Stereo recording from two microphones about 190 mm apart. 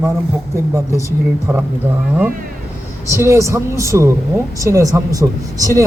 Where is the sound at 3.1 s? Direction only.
15° right (ahead or behind).